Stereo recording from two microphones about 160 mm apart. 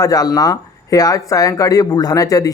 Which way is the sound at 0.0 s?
25° left (ahead or behind).